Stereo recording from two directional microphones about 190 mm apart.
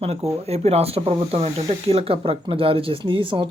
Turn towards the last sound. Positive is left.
turn(degrees=-25)  # may be behind; listen again after turning